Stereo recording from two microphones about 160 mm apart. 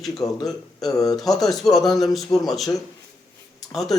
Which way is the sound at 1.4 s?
Centre (ahead or behind).